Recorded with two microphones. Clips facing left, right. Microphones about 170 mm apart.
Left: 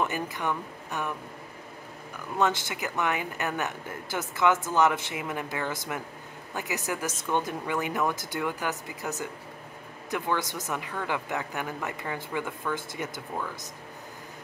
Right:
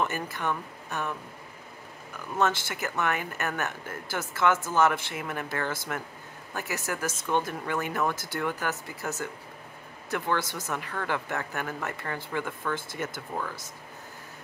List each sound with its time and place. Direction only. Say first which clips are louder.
0.0 s speech: left 1 dB; 15° left (ahead or behind)
2.3 s speech: even; 15° left (ahead or behind)